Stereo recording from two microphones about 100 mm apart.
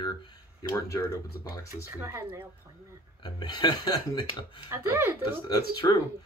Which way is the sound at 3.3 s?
45° left (ahead or behind).